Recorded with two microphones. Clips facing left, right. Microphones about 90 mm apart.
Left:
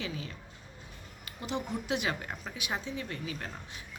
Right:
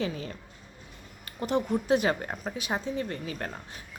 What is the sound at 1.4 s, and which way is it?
Speech, 45° right (ahead or behind).